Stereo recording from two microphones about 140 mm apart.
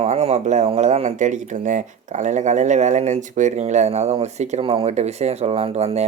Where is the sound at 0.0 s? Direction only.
50° right (ahead or behind).